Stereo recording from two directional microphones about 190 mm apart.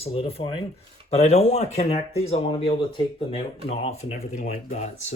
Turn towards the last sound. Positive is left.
turn(degrees=40)  # may be behind; listen again after turning